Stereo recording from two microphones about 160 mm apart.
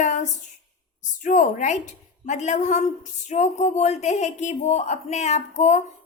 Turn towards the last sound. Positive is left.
turn(degrees=45)  # may be behind; listen again after turning